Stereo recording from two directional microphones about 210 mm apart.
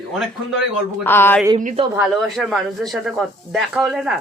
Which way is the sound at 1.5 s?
35° right (ahead or behind).